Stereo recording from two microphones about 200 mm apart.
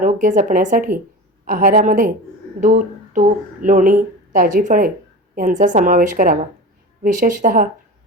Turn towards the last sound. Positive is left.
turn(degrees=-45)  # may be behind; listen again after turning